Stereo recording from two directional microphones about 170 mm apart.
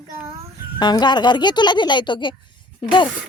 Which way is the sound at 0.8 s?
25° left (ahead or behind).